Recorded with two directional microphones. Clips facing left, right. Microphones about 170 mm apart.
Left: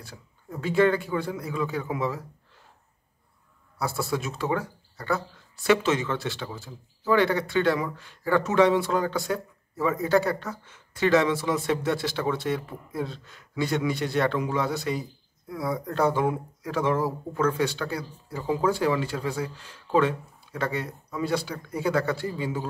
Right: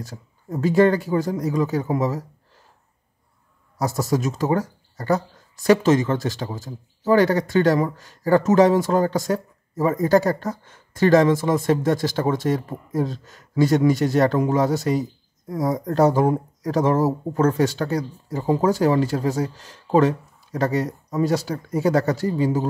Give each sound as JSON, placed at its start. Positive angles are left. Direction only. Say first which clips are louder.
{"t": 0.0, "sound": "speech", "louder": "right 9 dB", "side_deg": -40}
{"t": 3.7, "sound": "speech", "louder": "right 6 dB", "side_deg": -40}